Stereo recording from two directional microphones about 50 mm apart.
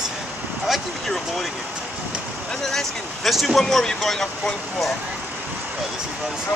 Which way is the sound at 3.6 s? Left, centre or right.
Centre.